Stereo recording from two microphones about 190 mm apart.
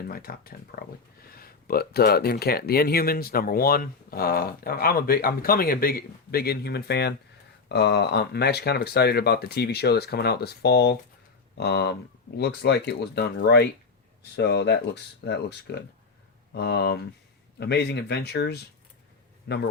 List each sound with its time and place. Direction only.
0.1 s speech: 50° left (ahead or behind)